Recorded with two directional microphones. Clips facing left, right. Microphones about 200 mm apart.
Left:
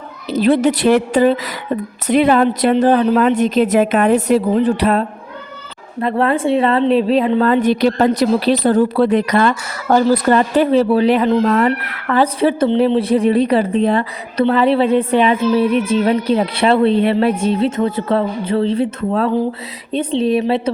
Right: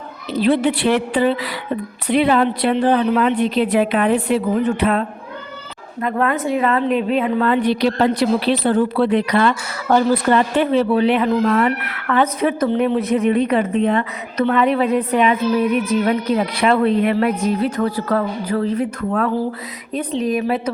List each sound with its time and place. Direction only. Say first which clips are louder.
0.3 s a woman's voice: left 3 dB; 45° left (ahead or behind)